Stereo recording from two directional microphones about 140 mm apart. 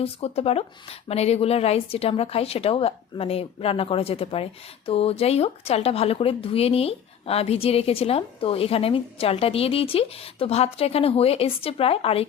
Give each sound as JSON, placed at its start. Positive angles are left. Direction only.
{"t": 0.0, "sound": "speech", "side_deg": 45}